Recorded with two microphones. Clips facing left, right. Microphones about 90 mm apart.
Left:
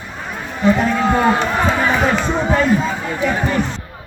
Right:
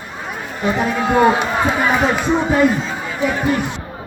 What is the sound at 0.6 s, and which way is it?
Speech, 10° right (ahead or behind).